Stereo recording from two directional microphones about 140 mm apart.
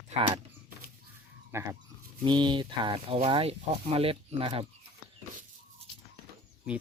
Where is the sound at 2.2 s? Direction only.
35° right (ahead or behind).